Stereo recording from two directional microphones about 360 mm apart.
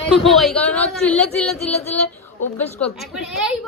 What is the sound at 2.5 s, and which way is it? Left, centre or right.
Speech, centre.